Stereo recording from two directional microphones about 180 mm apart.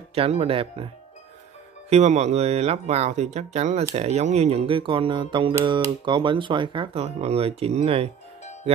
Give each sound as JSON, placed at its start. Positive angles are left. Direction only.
{"t": 0.1, "sound": "speech", "side_deg": -35}
{"t": 1.9, "sound": "speech", "side_deg": -40}